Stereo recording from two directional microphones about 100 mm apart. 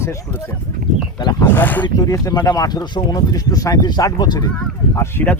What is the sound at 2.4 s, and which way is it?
Speech, 40° left (ahead or behind).